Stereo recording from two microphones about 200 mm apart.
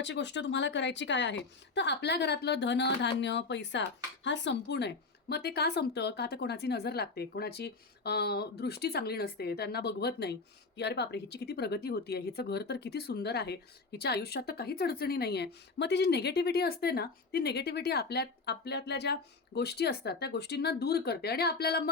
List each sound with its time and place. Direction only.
0.0 s a woman's voice: 60° left (ahead or behind)